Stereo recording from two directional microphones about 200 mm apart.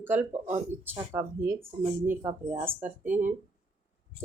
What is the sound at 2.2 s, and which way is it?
Speech, 25° right (ahead or behind).